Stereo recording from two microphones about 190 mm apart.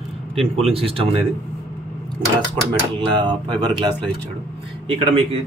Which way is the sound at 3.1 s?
25° right (ahead or behind).